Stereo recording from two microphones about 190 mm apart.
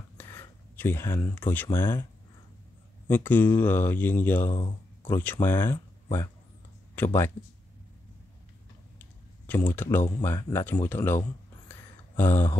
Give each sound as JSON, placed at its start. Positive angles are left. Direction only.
{"t": 0.2, "sound": "speech", "side_deg": 10}
{"t": 3.1, "sound": "speech", "side_deg": 10}
{"t": 4.5, "sound": "speech", "side_deg": 25}
{"t": 5.1, "sound": "speech", "side_deg": 10}
{"t": 9.5, "sound": "speech", "side_deg": 10}